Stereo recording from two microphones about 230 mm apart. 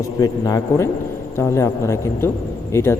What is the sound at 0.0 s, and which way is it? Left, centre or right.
A man's voice, centre.